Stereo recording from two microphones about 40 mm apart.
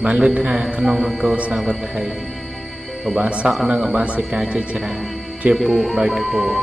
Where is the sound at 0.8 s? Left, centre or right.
Centre.